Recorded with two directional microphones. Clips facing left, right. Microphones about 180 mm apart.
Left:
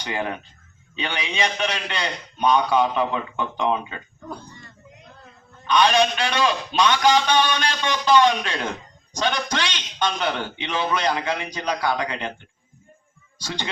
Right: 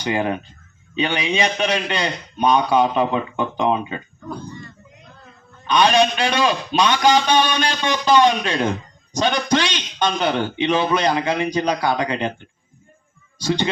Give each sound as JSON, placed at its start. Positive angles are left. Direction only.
{"t": 0.0, "sound": "a man's voice", "side_deg": -15}
{"t": 5.6, "sound": "a man's voice", "side_deg": -15}